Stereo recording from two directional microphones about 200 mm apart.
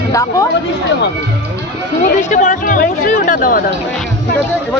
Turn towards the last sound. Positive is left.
turn(degrees=45)  # may be behind; listen again after turning